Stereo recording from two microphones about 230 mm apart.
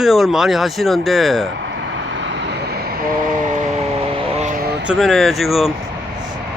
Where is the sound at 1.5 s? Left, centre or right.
Right.